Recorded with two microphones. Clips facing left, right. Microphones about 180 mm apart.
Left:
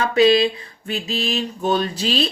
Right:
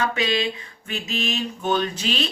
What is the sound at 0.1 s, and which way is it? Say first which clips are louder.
Speech: left 9 dB; 35° left (ahead or behind).